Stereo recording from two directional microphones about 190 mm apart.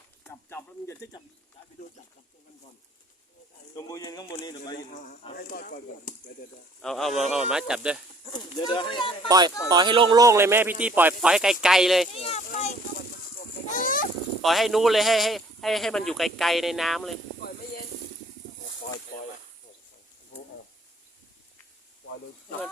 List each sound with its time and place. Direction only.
0.3 s speech: 15° left (ahead or behind)
3.8 s speech: 20° left (ahead or behind)
4.9 s speech: 35° left (ahead or behind)
6.8 s a man's voice: centre (ahead or behind)
8.2 s speech: 25° left (ahead or behind)
9.6 s speech: 20° right (ahead or behind); by 12.0 s centre (ahead or behind)
12.1 s speech: 30° left (ahead or behind)
14.4 s a man's voice: centre (ahead or behind)